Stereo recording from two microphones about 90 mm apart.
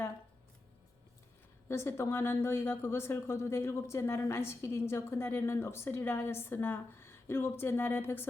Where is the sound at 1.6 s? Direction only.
30° left (ahead or behind).